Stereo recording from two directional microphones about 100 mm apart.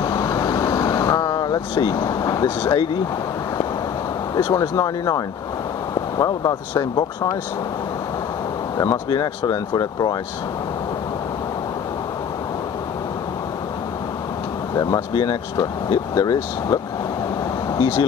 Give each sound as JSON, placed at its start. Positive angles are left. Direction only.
{"t": 0.0, "sound": "vehicle", "side_deg": 40}
{"t": 4.4, "sound": "speech", "side_deg": 45}
{"t": 8.7, "sound": "speech", "side_deg": 35}
{"t": 9.1, "sound": "speech", "side_deg": 45}
{"t": 15.9, "sound": "speech", "side_deg": 40}